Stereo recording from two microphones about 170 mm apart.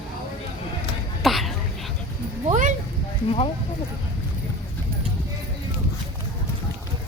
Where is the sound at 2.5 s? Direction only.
50° right (ahead or behind).